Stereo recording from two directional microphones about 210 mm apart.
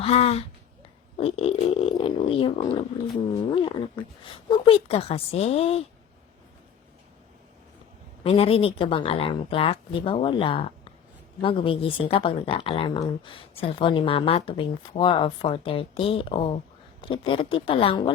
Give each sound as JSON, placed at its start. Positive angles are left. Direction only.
{"t": 0.0, "sound": "a woman's voice", "side_deg": 30}
{"t": 8.2, "sound": "a woman's voice", "side_deg": 25}